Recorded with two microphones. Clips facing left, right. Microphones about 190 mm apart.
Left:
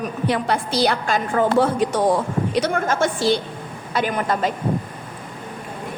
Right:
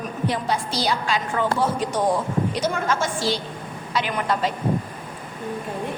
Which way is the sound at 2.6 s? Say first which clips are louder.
Left 3 dB; 55° left (ahead or behind).